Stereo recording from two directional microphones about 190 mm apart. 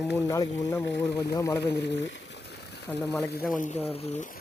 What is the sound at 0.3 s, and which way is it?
Speech, 15° left (ahead or behind).